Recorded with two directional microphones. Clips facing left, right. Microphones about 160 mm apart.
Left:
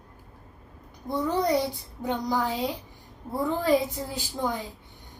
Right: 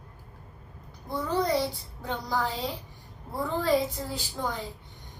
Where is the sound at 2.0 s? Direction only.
15° left (ahead or behind).